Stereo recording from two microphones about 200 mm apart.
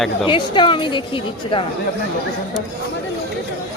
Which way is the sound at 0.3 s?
25° left (ahead or behind).